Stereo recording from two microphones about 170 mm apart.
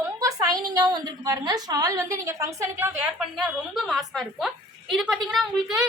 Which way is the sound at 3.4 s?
Centre (ahead or behind).